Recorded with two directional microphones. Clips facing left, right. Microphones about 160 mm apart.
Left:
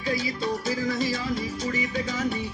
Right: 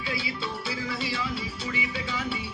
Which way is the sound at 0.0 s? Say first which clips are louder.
Left 5 dB; 40° left (ahead or behind).